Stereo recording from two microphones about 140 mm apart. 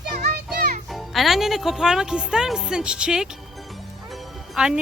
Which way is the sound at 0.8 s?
Centre (ahead or behind).